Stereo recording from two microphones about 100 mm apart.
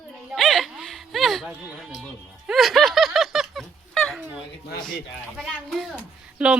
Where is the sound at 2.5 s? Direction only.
Centre (ahead or behind).